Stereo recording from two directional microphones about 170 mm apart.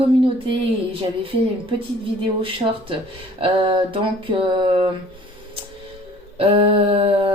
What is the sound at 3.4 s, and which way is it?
Speech, 30° right (ahead or behind).